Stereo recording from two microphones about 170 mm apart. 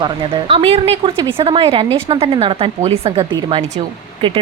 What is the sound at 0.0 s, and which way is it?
A woman's voice, 30° right (ahead or behind).